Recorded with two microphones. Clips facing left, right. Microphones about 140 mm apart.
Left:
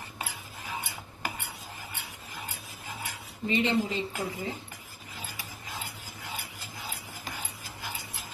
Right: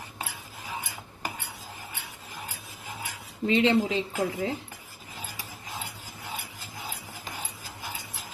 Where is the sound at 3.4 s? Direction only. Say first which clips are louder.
Right 4 dB; 90° right.